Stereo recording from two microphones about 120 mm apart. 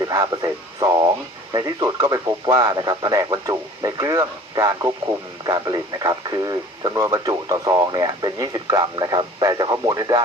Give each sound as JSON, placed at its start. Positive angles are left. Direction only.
{"t": 0.0, "sound": "radio", "side_deg": -30}
{"t": 1.5, "sound": "speech", "side_deg": -30}